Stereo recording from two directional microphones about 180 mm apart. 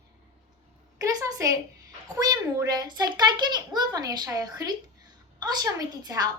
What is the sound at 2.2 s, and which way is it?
A woman's voice, 20° right (ahead or behind).